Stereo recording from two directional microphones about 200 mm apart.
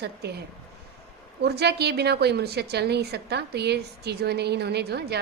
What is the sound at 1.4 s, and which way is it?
A woman's voice, 55° right (ahead or behind).